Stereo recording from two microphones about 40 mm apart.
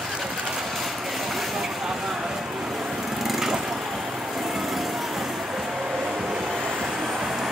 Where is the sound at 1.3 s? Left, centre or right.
Centre.